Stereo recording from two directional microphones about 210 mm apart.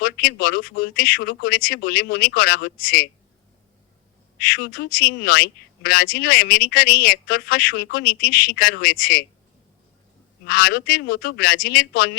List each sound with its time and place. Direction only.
0.0 s a woman's voice: 45° left (ahead or behind)
4.5 s a woman's voice: 45° left (ahead or behind)
10.4 s a woman's voice: 45° left (ahead or behind)